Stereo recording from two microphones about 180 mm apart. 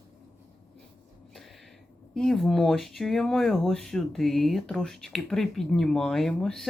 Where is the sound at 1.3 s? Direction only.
Centre (ahead or behind).